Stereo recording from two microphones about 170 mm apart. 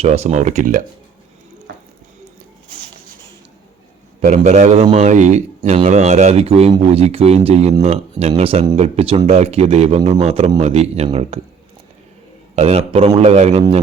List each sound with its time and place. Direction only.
0.0 s speech: 40° right (ahead or behind)
4.3 s speech: 45° right (ahead or behind)
12.5 s speech: 40° right (ahead or behind)